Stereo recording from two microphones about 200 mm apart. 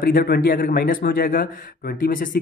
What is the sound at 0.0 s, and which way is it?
Speech, 50° left (ahead or behind).